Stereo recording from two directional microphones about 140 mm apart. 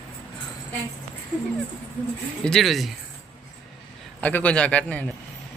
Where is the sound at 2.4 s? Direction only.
5° left (ahead or behind).